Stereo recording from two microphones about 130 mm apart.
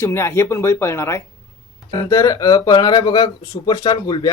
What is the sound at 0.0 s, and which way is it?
Speech, 20° left (ahead or behind).